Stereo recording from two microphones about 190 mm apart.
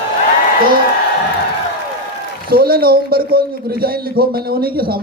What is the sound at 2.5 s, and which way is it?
A man's voice, 50° right (ahead or behind).